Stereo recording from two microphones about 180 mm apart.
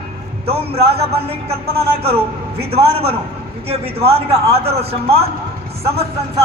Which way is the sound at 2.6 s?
35° right (ahead or behind).